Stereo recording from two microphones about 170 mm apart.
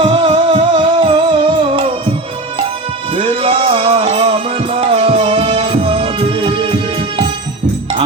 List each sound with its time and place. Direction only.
0.0 s music: 30° right (ahead or behind)
3.2 s music: 35° right (ahead or behind)